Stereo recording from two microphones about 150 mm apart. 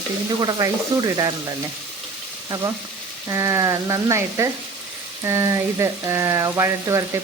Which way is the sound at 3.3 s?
20° right (ahead or behind).